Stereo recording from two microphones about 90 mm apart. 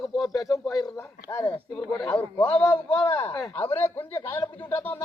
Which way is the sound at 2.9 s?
60° left (ahead or behind).